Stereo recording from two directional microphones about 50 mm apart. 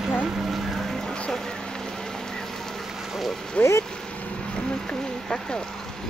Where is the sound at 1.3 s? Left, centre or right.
Centre.